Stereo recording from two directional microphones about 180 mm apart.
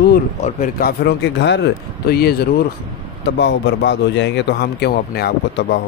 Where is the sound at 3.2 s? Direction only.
75° left (ahead or behind).